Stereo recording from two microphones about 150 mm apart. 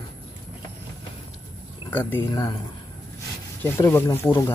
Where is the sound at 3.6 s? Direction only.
15° left (ahead or behind).